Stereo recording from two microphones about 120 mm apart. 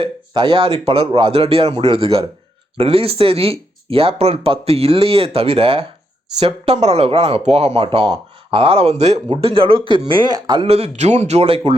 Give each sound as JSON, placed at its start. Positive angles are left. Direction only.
{"t": 0.0, "sound": "speech", "side_deg": -45}
{"t": 6.4, "sound": "speech", "side_deg": -60}
{"t": 9.3, "sound": "speech", "side_deg": -50}
{"t": 10.7, "sound": "speech", "side_deg": -60}